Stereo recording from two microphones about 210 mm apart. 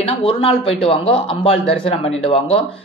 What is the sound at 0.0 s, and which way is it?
Speech, 25° left (ahead or behind).